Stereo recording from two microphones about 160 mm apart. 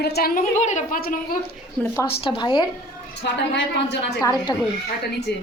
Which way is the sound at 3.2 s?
90° left.